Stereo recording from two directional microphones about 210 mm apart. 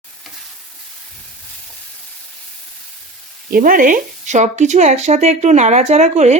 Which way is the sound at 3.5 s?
40° right (ahead or behind).